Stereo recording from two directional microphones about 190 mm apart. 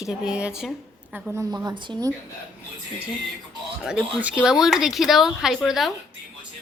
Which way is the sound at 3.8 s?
5° right (ahead or behind).